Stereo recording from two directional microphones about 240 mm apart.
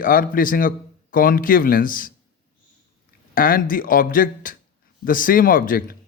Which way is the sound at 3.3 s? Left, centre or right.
Left.